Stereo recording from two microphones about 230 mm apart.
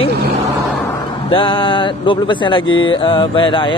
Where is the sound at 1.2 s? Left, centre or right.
Left.